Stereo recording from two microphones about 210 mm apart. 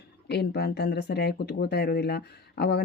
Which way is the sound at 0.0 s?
50° left (ahead or behind).